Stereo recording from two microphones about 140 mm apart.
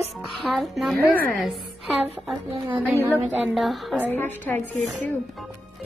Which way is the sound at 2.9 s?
15° right (ahead or behind).